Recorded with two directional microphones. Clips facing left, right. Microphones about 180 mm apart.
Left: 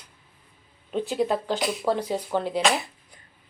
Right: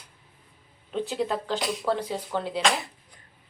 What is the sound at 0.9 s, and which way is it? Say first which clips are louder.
Speech: left 3 dB; 10° left (ahead or behind).